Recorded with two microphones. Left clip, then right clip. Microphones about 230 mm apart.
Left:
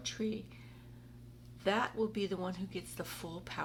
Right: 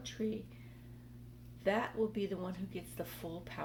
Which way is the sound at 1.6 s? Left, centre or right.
Centre.